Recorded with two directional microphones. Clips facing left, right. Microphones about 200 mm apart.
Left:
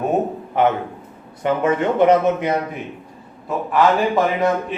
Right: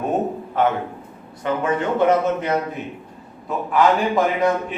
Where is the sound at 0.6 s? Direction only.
15° left (ahead or behind).